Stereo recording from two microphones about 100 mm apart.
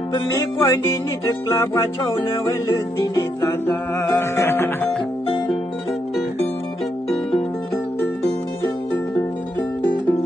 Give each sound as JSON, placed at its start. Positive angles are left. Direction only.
{"t": 0.3, "sound": "music", "side_deg": 35}
{"t": 4.0, "sound": "music", "side_deg": 30}